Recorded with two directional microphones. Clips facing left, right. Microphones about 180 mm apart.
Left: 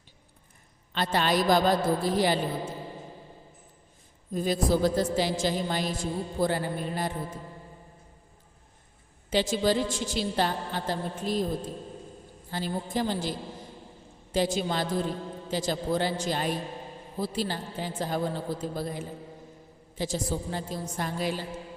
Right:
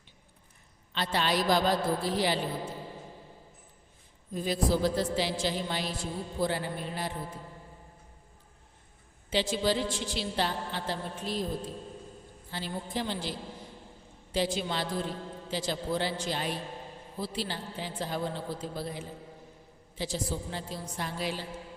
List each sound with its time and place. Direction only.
0.9 s a woman's voice: 50° left (ahead or behind)
4.4 s a woman's voice: 45° left (ahead or behind)
9.3 s a woman's voice: 45° left (ahead or behind)
12.5 s a woman's voice: 45° left (ahead or behind)
14.3 s a woman's voice: 45° left (ahead or behind)